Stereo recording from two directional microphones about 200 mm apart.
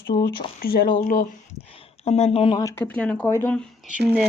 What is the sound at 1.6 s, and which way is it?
Speech, 30° left (ahead or behind).